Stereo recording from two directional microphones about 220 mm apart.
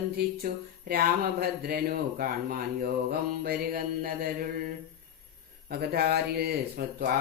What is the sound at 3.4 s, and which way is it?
Speech, 45° right (ahead or behind).